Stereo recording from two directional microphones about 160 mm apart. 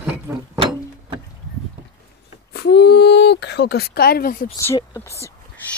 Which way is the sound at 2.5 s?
90° left.